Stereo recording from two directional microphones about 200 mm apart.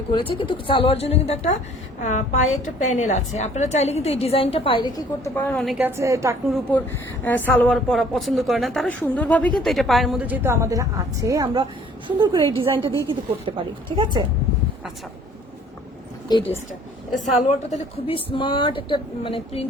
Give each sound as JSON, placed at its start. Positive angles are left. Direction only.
{"t": 0.3, "sound": "a woman's voice", "side_deg": 25}
{"t": 7.3, "sound": "a woman's voice", "side_deg": 10}
{"t": 16.3, "sound": "a woman's voice", "side_deg": 20}
{"t": 17.2, "sound": "a woman's voice", "side_deg": 35}